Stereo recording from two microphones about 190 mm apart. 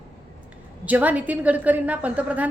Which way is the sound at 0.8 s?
10° right (ahead or behind).